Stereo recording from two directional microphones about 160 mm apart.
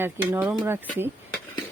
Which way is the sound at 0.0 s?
10° right (ahead or behind).